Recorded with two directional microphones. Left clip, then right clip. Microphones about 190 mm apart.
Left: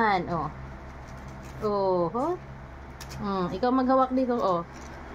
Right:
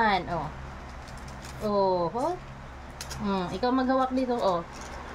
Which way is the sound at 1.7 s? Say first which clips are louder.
Even; 15° right (ahead or behind).